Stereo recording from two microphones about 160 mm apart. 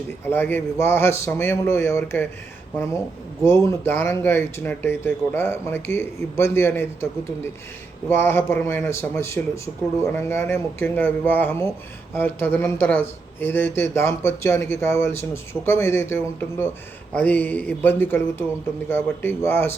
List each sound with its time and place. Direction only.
0.3 s a man's voice: 15° left (ahead or behind)
3.4 s a man's voice: 15° left (ahead or behind)